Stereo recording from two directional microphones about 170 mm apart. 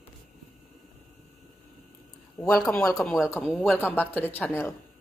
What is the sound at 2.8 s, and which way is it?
Speech, 15° left (ahead or behind).